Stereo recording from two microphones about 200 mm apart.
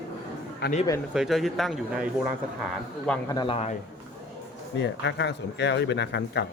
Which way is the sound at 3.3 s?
25° left (ahead or behind).